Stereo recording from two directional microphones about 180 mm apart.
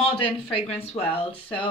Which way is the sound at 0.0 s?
30° left (ahead or behind).